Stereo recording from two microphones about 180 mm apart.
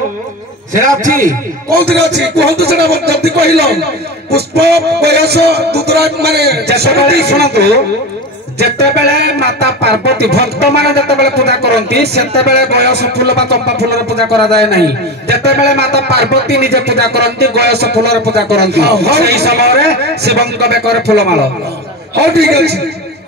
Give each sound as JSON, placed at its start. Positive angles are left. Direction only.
{"t": 1.9, "sound": "speech", "side_deg": -70}